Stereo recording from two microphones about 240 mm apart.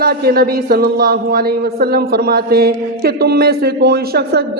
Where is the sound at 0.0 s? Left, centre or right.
Right.